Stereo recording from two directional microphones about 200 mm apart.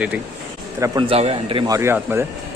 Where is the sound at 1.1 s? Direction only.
30° right (ahead or behind).